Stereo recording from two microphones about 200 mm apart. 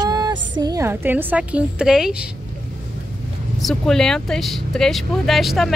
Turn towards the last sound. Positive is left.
turn(degrees=0)  # may be behind; listen again after turning